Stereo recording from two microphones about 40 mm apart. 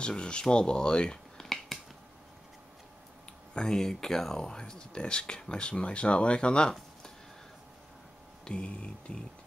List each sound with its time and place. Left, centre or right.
0.0 s speech: left
1.4 s finger snapping: centre
3.6 s speech: centre
8.5 s a sound: left